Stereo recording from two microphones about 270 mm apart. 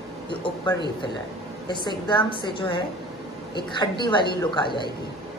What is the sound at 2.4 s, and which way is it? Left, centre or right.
A woman's voice, centre.